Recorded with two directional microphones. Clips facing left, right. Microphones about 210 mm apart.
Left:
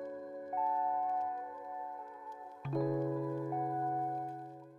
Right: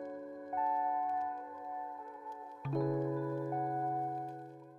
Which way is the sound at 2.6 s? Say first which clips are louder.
Even; centre (ahead or behind).